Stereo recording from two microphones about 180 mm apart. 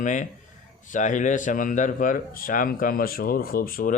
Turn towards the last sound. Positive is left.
turn(degrees=50)  # may be behind; listen again after turning